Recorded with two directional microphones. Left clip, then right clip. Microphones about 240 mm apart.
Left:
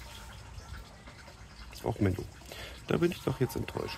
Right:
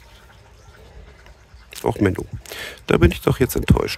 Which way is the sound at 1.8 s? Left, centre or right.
Right.